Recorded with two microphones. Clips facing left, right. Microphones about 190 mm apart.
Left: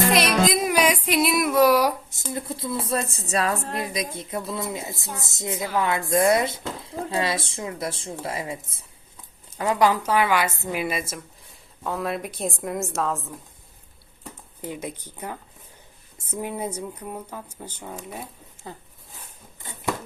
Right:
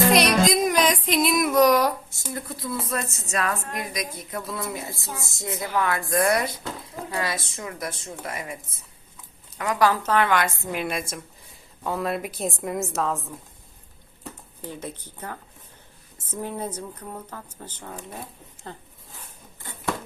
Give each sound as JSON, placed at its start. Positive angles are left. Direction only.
{"t": 0.1, "sound": "music", "side_deg": 0}
{"t": 4.5, "sound": "a woman's voice", "side_deg": 20}
{"t": 14.6, "sound": "speech", "side_deg": 15}